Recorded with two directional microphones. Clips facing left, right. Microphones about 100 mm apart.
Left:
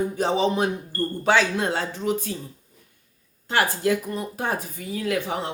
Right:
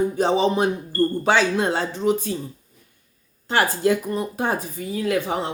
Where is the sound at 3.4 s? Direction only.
30° right (ahead or behind).